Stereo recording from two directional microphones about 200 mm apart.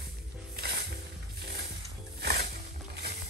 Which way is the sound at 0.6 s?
55° right (ahead or behind).